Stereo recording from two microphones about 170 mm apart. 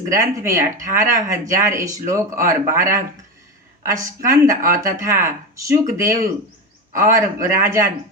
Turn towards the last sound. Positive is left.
turn(degrees=-15)  # may be behind; listen again after turning